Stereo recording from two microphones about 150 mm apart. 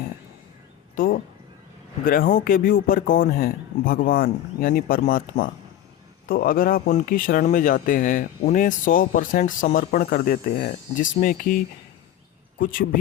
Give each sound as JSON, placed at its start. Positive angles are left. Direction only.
{"t": 0.9, "sound": "speech", "side_deg": 70}